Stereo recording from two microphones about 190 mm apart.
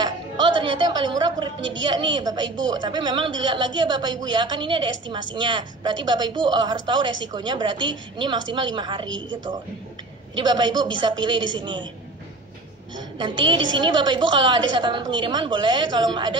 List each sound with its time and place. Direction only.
0.0 s a woman's voice: 25° right (ahead or behind)
10.3 s a woman's voice: 25° right (ahead or behind)
13.2 s a woman's voice: 25° right (ahead or behind)